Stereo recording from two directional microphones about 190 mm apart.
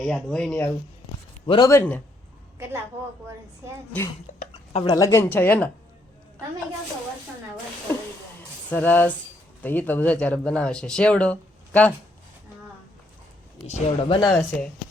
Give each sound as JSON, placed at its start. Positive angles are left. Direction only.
{"t": 0.0, "sound": "speech", "side_deg": 5}
{"t": 1.5, "sound": "speech", "side_deg": 25}
{"t": 1.7, "sound": "speech", "side_deg": 10}
{"t": 4.4, "sound": "a sound", "side_deg": 35}
{"t": 4.9, "sound": "speech", "side_deg": 15}
{"t": 8.7, "sound": "speech", "side_deg": 10}
{"t": 13.7, "sound": "speech", "side_deg": 25}
{"t": 14.3, "sound": "speech", "side_deg": 5}